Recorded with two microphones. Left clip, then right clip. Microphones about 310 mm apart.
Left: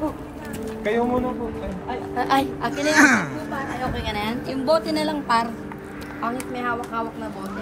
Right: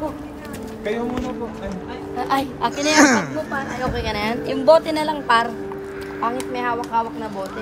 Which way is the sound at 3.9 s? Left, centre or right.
Right.